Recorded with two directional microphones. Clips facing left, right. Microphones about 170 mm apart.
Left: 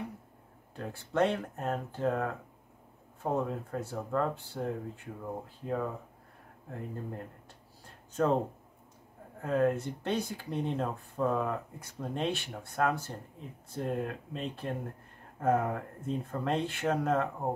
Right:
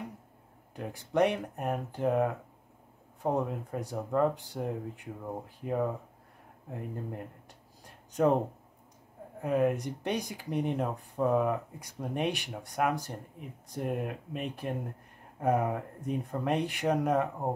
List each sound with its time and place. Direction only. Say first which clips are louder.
0.7 s speech: right 2 dB; 15° right (ahead or behind)
6.7 s speech: right 1 dB; 15° right (ahead or behind)
7.8 s a sound: right 3 dB; 15° right (ahead or behind)
9.4 s speech: right 1 dB; 15° right (ahead or behind)